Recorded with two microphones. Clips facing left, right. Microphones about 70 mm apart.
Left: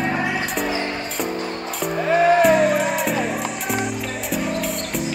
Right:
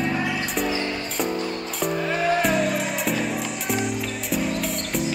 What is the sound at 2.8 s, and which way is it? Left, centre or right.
Music, centre.